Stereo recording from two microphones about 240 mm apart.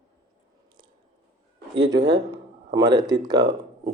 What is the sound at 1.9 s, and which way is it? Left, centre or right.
Speech, centre.